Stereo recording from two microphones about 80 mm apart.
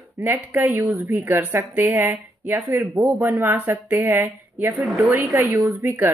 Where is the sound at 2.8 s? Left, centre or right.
Right.